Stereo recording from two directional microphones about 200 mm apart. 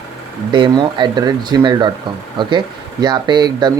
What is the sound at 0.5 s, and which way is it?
Speech, 25° right (ahead or behind).